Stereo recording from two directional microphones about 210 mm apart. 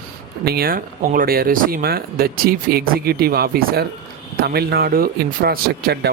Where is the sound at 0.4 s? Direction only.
45° right (ahead or behind).